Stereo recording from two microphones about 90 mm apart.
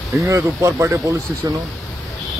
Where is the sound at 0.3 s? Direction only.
30° right (ahead or behind).